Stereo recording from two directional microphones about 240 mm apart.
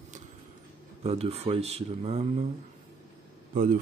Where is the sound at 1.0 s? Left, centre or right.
Right.